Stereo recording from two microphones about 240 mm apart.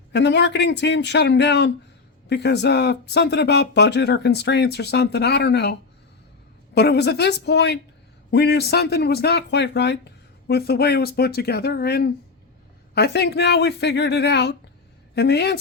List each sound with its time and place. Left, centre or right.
0.1 s a man's voice: left
6.7 s a man's voice: left